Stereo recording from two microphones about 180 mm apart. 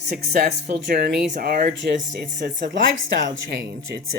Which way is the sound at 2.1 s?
80° right.